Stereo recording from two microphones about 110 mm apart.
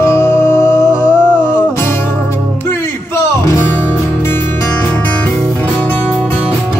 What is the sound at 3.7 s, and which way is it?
Music, 20° left (ahead or behind).